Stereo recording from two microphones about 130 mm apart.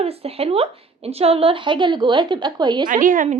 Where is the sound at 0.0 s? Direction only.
50° right (ahead or behind); by 2.8 s 35° right (ahead or behind).